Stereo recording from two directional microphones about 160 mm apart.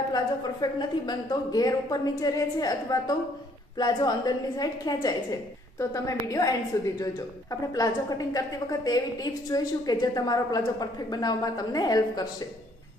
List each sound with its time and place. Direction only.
0.1 s a woman's voice: 25° left (ahead or behind)
7.7 s a woman's voice: 25° left (ahead or behind)